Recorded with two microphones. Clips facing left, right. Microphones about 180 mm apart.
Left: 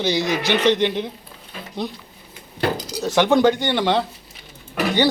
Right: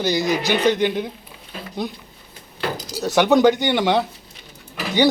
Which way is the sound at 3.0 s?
5° right (ahead or behind).